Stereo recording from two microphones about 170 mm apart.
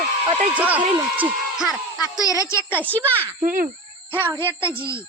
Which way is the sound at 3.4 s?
50° right (ahead or behind).